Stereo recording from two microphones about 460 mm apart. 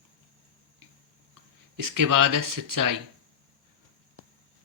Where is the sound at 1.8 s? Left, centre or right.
Right.